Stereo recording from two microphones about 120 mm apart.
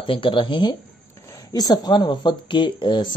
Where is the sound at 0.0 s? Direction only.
45° left (ahead or behind).